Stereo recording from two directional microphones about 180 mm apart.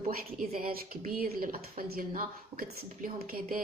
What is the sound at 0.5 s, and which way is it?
Speech, 50° right (ahead or behind).